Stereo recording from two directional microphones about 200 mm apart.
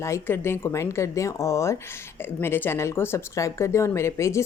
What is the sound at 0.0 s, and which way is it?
Speech, 15° left (ahead or behind).